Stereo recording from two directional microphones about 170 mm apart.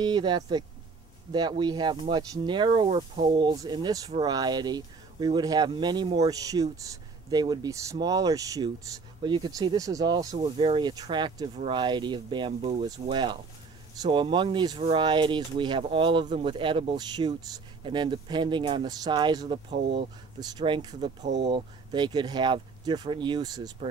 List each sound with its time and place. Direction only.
0.0 s speech: 25° right (ahead or behind)